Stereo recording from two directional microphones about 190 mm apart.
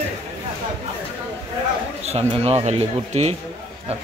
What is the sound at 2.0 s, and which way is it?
Speech, 35° right (ahead or behind).